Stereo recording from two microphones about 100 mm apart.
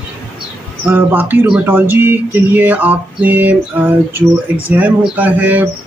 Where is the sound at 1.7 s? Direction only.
20° right (ahead or behind).